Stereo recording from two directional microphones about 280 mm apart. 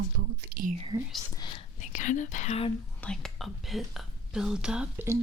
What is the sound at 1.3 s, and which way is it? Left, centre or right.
Whispering, centre.